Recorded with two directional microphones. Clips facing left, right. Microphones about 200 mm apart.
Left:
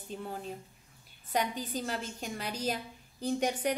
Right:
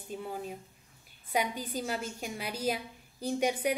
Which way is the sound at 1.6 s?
10° right (ahead or behind).